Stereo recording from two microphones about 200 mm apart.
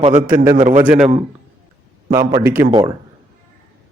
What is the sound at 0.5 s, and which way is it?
Speech, 35° right (ahead or behind).